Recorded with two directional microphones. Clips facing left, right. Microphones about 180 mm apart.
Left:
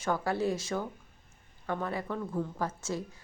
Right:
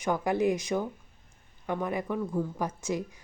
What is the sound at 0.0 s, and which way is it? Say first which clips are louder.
Speech: right 3 dB; 15° right (ahead or behind).